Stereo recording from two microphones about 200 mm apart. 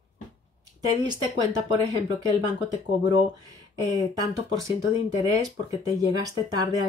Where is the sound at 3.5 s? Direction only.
15° right (ahead or behind).